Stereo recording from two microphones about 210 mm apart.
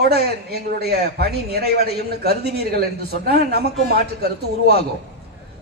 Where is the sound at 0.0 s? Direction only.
50° right (ahead or behind).